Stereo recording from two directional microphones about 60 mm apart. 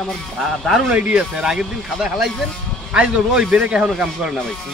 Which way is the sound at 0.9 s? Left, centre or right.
Centre.